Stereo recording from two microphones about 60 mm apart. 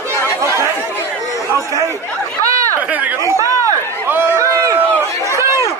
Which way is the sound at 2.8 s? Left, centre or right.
Right.